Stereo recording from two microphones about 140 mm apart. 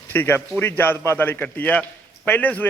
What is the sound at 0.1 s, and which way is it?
A man's voice, 15° left (ahead or behind).